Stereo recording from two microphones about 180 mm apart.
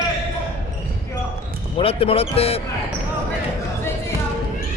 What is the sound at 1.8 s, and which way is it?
Speech, 30° left (ahead or behind).